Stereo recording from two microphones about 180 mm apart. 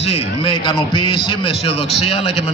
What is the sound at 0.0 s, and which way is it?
A man's voice, 30° left (ahead or behind).